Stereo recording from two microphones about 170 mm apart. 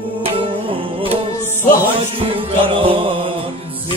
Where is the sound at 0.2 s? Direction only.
30° right (ahead or behind).